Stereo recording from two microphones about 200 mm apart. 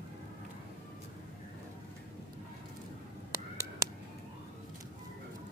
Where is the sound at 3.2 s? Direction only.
15° right (ahead or behind).